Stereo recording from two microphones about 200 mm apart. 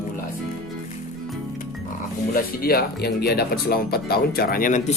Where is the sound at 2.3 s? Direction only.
50° left (ahead or behind).